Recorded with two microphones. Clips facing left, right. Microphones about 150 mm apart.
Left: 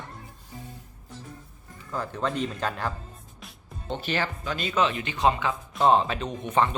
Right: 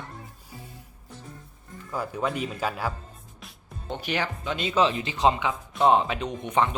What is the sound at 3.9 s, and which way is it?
Speech, 15° right (ahead or behind).